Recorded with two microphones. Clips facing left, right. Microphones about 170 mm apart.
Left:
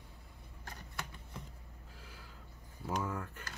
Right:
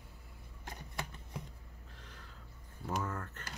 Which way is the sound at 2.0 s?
5° left (ahead or behind).